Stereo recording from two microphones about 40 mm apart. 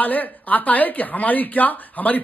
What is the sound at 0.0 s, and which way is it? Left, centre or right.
Speech, left.